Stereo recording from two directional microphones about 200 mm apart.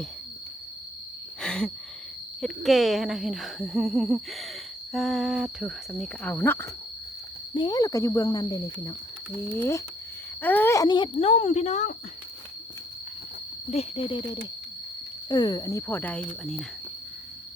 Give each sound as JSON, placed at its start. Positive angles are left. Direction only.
{"t": 1.4, "sound": "a sound", "side_deg": 5}
{"t": 2.4, "sound": "speech", "side_deg": 0}
{"t": 13.7, "sound": "speech", "side_deg": 30}
{"t": 15.3, "sound": "speech", "side_deg": 20}